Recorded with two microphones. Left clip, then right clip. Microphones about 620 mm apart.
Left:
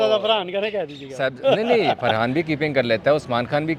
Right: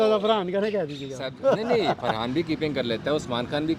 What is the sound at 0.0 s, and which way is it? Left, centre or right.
Speech, centre.